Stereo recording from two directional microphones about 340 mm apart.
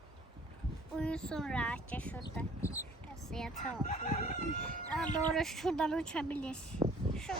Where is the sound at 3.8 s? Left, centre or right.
Left.